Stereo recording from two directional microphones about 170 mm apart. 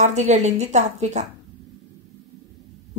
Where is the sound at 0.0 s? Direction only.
45° right (ahead or behind).